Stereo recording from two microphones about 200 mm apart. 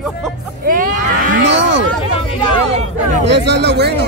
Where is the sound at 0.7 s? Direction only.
45° right (ahead or behind).